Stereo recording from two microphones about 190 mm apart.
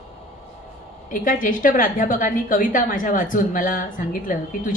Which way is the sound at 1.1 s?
45° left (ahead or behind).